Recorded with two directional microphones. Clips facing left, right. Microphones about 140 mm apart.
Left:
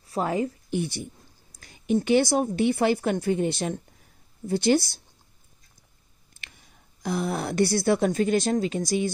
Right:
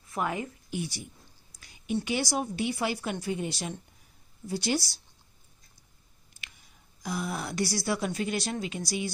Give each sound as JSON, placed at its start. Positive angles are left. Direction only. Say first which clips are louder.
{"t": 0.0, "sound": "a woman's voice", "louder": "left 6 dB", "side_deg": 30}
{"t": 0.7, "sound": "a woman's voice", "louder": "left 6 dB", "side_deg": 60}
{"t": 6.4, "sound": "speech", "louder": "left 2 dB", "side_deg": 55}